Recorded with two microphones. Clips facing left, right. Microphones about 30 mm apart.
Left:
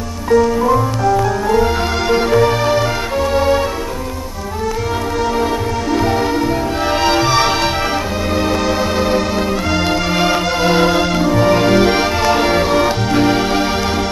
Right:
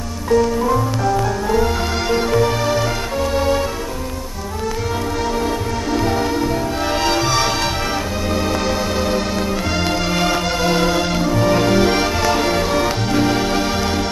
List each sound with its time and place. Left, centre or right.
0.3 s music: centre
5.9 s music: centre
10.1 s music: centre